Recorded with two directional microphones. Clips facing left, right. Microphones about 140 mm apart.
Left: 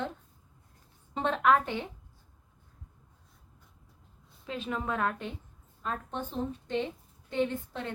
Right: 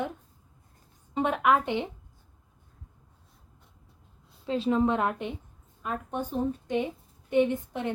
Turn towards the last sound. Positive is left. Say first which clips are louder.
# right 4 dB
turn(degrees=-20)  # may be behind; listen again after turning